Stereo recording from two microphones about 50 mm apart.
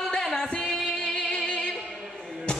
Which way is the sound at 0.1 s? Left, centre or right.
Centre.